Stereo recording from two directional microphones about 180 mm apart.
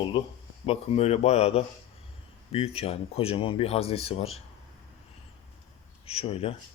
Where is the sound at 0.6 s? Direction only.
35° left (ahead or behind).